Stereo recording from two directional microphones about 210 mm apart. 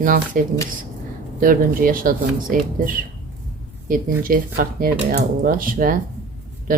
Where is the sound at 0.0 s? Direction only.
40° right (ahead or behind).